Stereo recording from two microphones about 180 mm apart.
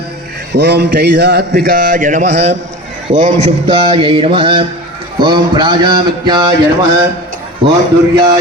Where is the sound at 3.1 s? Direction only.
40° right (ahead or behind); by 6.5 s 25° right (ahead or behind).